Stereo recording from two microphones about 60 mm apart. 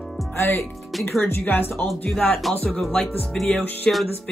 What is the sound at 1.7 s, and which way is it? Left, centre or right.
Speech, centre.